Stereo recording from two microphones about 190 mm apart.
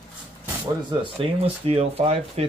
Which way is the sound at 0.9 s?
30° right (ahead or behind).